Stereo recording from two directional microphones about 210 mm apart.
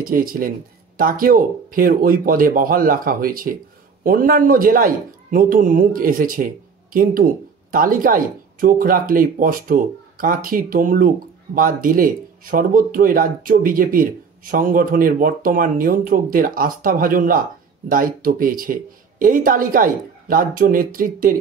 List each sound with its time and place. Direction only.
0.0 s speech: 40° right (ahead or behind)